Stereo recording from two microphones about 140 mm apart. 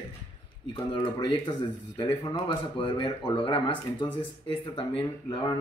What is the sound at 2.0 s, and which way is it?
Speech, 40° left (ahead or behind).